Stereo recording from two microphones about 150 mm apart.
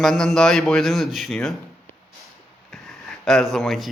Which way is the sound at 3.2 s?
5° left (ahead or behind).